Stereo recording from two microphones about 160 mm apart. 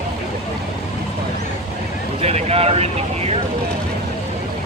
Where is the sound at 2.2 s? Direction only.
40° right (ahead or behind).